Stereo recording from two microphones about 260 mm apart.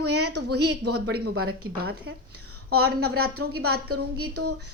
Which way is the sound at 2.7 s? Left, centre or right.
Right.